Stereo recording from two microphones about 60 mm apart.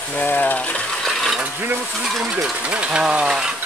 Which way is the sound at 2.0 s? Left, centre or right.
Centre.